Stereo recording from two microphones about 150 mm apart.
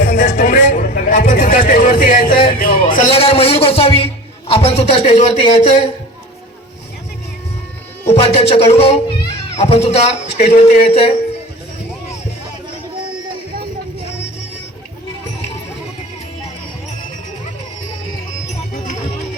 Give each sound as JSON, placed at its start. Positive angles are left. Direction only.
{"t": 0.0, "sound": "a sound", "side_deg": 65}
{"t": 3.1, "sound": "a man's voice", "side_deg": 40}
{"t": 8.0, "sound": "a child's voice", "side_deg": 45}